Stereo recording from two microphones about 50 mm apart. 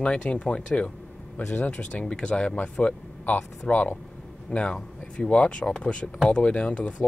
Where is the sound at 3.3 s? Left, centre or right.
Left.